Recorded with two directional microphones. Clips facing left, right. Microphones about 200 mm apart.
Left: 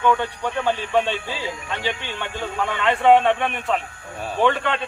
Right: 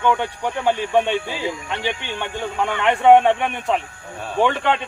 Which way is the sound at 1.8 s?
20° right (ahead or behind).